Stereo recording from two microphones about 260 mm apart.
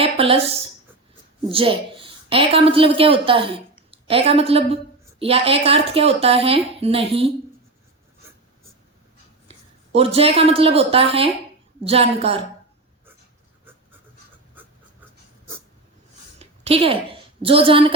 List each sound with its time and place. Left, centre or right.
0.0 s a woman's voice: right
9.5 s a woman's voice: right
16.4 s a woman's voice: right